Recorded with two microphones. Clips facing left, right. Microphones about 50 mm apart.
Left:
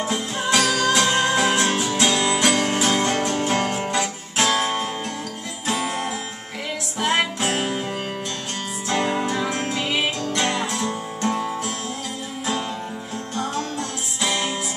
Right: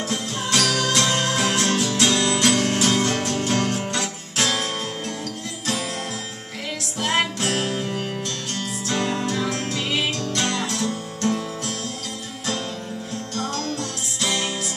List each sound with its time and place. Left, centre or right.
0.0 s music: centre
7.0 s music: centre
13.3 s music: centre